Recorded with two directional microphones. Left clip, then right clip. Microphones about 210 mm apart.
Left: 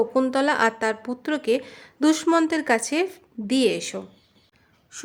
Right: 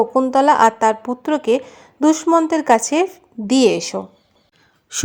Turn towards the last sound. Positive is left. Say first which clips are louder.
# right 13 dB
turn(degrees=-40)  # may be behind; listen again after turning